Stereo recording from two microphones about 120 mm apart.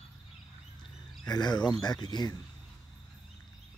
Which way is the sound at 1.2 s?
35° left (ahead or behind).